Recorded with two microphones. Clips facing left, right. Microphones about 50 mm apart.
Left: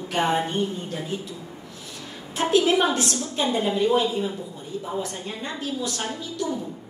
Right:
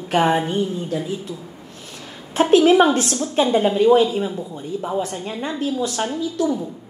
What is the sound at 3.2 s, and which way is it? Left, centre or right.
Speech, right.